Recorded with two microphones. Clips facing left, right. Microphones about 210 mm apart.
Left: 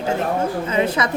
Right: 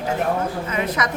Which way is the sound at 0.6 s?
30° left (ahead or behind).